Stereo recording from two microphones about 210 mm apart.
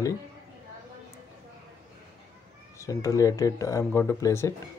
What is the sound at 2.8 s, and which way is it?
Speech, 15° left (ahead or behind).